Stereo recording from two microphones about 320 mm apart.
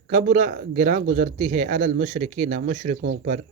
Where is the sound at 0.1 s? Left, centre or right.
Right.